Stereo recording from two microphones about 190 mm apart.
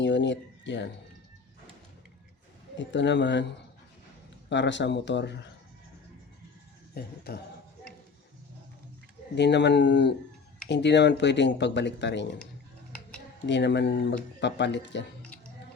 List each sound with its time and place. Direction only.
0.0 s speech: 70° left (ahead or behind)
2.7 s speech: 70° left (ahead or behind)
4.4 s speech: 65° left (ahead or behind)
6.9 s speech: 55° left (ahead or behind)
9.3 s speech: 65° left (ahead or behind)
13.5 s speech: 65° left (ahead or behind)